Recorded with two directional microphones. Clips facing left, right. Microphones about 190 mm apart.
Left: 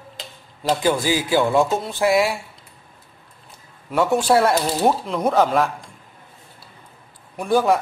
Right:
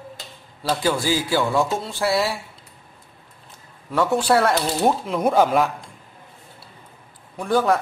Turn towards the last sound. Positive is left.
turn(degrees=10)  # may be behind; listen again after turning